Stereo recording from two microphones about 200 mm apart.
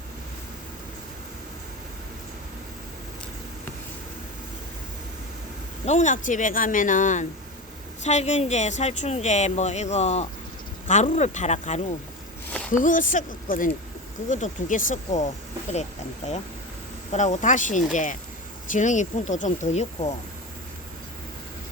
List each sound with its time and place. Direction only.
5.8 s a woman's voice: 35° left (ahead or behind)
17.1 s a woman's voice: 35° left (ahead or behind)